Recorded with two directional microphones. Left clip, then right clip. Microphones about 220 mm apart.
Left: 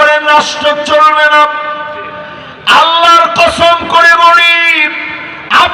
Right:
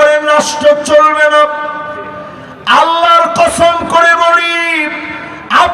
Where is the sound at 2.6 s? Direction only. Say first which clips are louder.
Left 2 dB; 55° right (ahead or behind).